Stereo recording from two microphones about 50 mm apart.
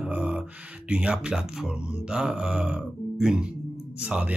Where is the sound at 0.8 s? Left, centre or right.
Right.